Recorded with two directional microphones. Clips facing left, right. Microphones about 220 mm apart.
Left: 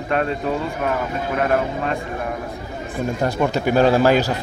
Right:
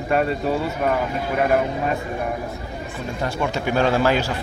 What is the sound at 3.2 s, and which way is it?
Speech, 40° left (ahead or behind).